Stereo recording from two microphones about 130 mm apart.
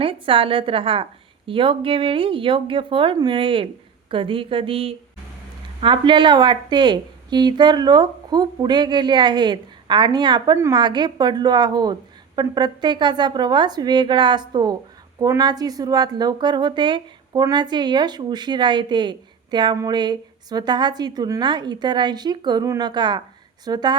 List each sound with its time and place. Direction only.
0.0 s a woman's voice: 45° right (ahead or behind)